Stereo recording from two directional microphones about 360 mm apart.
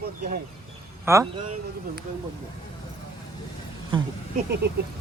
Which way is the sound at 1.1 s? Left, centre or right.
Centre.